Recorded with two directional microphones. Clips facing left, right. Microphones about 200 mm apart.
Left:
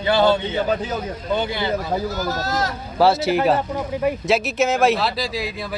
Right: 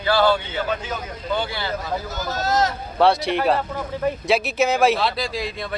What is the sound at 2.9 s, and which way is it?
Speech, 5° left (ahead or behind).